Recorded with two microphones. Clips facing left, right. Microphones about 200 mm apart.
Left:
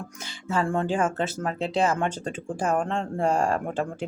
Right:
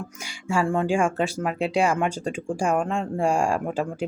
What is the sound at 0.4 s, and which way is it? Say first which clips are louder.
Speech: right 2 dB; 10° right (ahead or behind).